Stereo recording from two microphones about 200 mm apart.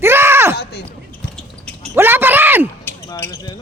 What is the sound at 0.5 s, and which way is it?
Speech, 55° left (ahead or behind).